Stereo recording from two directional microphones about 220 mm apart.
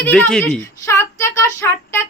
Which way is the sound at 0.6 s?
15° left (ahead or behind).